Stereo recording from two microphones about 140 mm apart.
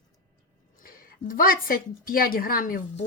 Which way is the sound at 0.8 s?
90° left.